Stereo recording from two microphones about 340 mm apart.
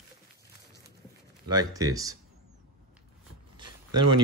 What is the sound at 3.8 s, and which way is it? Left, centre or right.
Speech, right.